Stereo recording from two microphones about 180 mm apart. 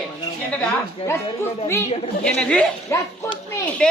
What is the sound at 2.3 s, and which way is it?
Speech, 5° left (ahead or behind).